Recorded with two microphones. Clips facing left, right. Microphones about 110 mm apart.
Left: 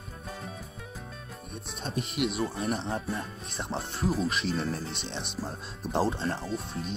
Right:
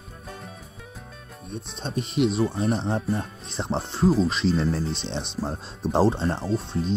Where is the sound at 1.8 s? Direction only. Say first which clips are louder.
Right 6 dB; 30° right (ahead or behind).